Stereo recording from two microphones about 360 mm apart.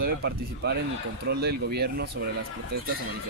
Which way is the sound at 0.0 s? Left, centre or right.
Right.